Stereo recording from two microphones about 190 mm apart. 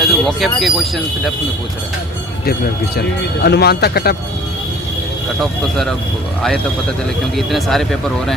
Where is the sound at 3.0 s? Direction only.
60° left (ahead or behind).